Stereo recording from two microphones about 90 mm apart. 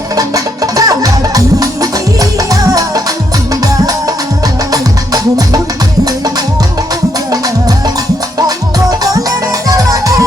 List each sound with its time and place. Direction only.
0.2 s music: 40° right (ahead or behind)
8.4 s music: 45° right (ahead or behind)